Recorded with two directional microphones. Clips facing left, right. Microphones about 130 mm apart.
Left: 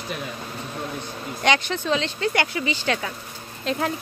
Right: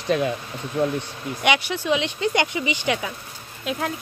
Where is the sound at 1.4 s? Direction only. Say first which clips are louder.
Even; 10° right (ahead or behind).